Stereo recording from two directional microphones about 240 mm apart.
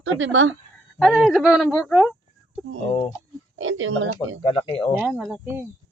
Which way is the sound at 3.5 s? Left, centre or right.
Right.